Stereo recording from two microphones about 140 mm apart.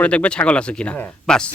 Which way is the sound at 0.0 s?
10° left (ahead or behind).